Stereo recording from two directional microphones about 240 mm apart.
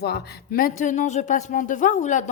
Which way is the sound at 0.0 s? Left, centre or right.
Left.